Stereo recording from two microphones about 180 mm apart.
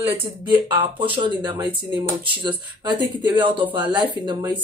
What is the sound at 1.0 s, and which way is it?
Speech, 25° right (ahead or behind).